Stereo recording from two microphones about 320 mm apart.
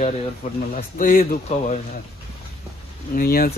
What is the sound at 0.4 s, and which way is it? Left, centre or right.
Speech, left.